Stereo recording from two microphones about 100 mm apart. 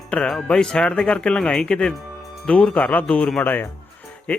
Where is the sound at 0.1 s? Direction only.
10° left (ahead or behind).